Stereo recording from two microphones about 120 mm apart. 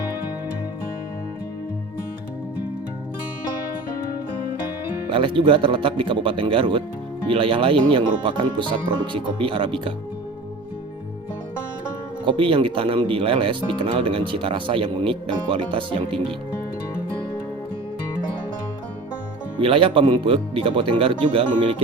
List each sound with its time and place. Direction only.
5.0 s speech: 45° right (ahead or behind)
12.2 s speech: 45° right (ahead or behind)
19.5 s speech: 50° right (ahead or behind)